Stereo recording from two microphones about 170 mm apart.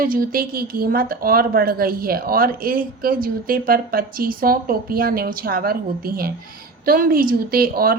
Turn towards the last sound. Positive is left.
turn(degrees=-60)  # may be behind; listen again after turning